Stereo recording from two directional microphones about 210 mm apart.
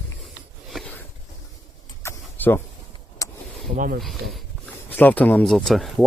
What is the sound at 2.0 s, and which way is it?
Vehicle, 10° left (ahead or behind).